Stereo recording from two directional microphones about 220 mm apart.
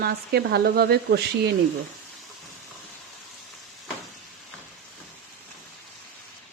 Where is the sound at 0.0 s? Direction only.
45° right (ahead or behind).